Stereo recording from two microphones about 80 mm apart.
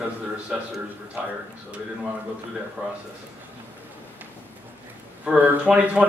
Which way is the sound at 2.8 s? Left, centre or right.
Centre.